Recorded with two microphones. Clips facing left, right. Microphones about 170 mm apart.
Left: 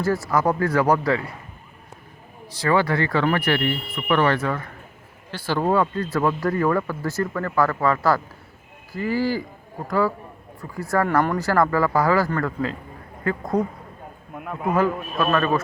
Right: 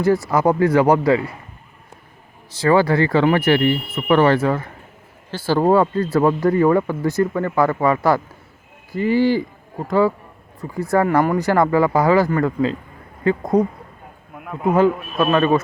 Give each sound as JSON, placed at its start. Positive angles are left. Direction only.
{"t": 0.3, "sound": "speech", "side_deg": -20}
{"t": 2.6, "sound": "speech", "side_deg": -30}
{"t": 10.6, "sound": "speech", "side_deg": -20}
{"t": 14.8, "sound": "speech", "side_deg": -20}